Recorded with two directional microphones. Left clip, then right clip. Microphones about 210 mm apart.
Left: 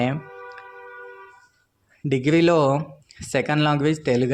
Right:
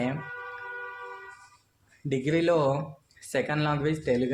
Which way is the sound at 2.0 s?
30° left (ahead or behind).